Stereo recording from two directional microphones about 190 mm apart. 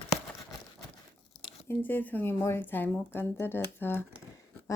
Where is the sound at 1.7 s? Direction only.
10° left (ahead or behind).